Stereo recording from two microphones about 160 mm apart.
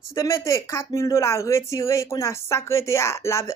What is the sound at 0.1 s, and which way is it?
Speech, 20° left (ahead or behind).